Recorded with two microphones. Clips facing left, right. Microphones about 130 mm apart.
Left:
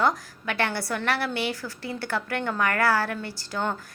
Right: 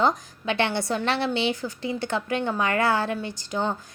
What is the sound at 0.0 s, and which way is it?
A woman's voice, 20° right (ahead or behind).